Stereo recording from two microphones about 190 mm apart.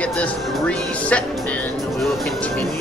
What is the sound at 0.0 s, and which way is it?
Speech, 5° left (ahead or behind).